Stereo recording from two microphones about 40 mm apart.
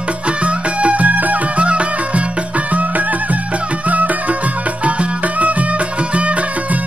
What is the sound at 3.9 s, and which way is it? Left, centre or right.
Music, right.